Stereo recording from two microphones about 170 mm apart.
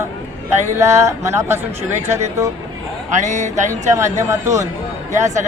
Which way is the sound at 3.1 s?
45° right (ahead or behind).